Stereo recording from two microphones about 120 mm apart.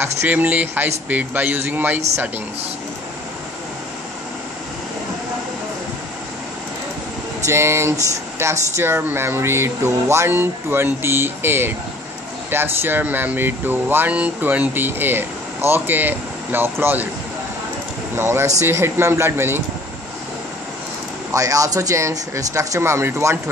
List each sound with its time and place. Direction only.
0.0 s speech: 15° right (ahead or behind)
7.4 s speech: 20° right (ahead or behind)
18.1 s speech: 20° right (ahead or behind)
21.3 s speech: 30° right (ahead or behind)